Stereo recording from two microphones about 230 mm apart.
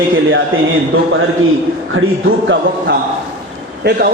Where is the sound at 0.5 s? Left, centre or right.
Right.